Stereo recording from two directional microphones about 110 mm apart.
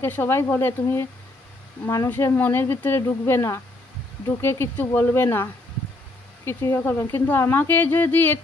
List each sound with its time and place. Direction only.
0.0 s a woman's voice: 20° left (ahead or behind)
2.0 s a woman's voice: 20° left (ahead or behind)